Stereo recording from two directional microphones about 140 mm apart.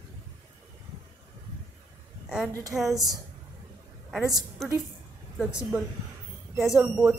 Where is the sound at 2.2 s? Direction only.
5° right (ahead or behind).